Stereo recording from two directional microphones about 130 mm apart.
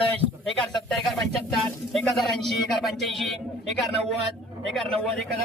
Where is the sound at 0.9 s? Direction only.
5° left (ahead or behind).